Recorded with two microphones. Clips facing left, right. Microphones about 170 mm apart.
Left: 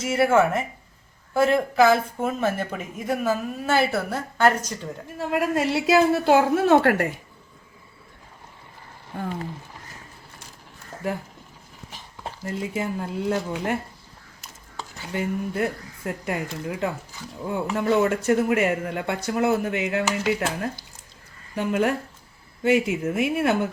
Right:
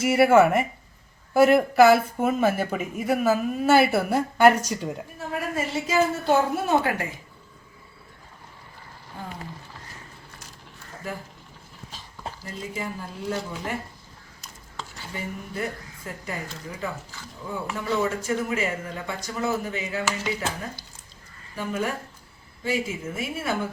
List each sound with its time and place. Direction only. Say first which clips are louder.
0.0 s speech: right 2 dB; 10° right (ahead or behind)
5.3 s a woman's voice: left 6 dB; 85° left
12.5 s speech: left 6 dB; 60° left (ahead or behind)
15.1 s speech: left 7 dB; 60° left (ahead or behind)